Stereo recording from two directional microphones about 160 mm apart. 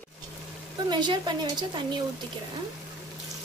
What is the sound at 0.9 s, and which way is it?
Speech, 30° right (ahead or behind).